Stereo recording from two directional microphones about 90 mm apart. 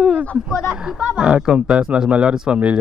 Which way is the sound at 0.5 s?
5° right (ahead or behind).